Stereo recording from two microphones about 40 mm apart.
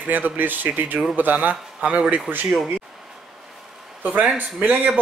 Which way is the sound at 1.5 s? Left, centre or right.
Right.